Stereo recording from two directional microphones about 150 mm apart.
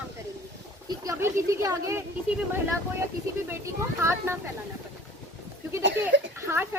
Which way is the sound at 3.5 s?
15° right (ahead or behind).